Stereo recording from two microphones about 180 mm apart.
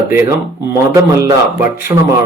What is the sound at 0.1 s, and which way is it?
Speech, 15° right (ahead or behind).